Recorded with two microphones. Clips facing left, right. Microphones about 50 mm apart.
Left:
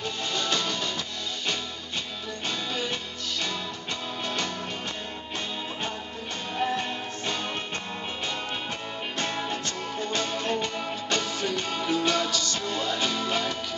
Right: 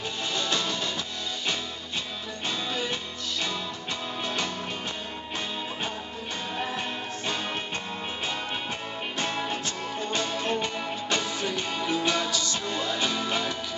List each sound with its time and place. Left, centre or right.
0.6 s music: centre
2.7 s music: centre
6.7 s music: centre
9.2 s music: centre